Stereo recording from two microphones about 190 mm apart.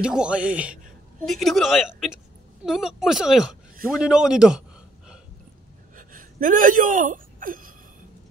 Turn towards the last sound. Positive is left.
turn(degrees=-45)  # may be behind; listen again after turning